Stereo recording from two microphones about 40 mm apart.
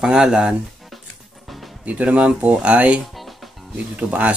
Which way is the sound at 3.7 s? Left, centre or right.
Right.